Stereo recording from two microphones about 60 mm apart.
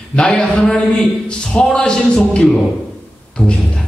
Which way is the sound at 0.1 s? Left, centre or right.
Centre.